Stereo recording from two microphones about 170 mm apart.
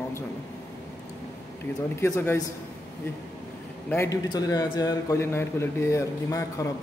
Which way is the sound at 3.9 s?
20° left (ahead or behind).